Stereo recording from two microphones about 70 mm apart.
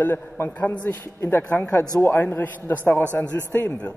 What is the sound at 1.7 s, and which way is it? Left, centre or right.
Speech, left.